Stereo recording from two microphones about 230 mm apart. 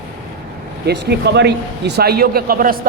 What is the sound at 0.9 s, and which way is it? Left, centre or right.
A man's voice, right.